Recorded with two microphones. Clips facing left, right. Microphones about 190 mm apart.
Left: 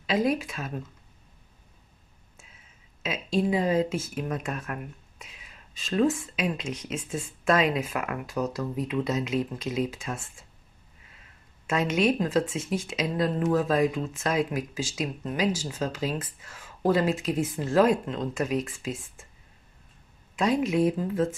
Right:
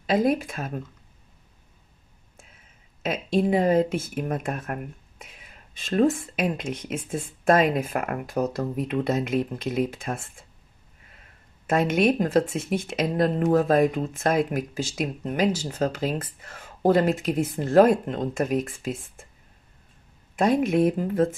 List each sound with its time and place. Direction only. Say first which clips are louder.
0.0 s speech: right 3 dB; 50° right (ahead or behind)
3.0 s speech: right 3 dB; 55° right (ahead or behind)
11.6 s speech: right 3 dB; 55° right (ahead or behind)
20.3 s speech: right 3 dB; 55° right (ahead or behind)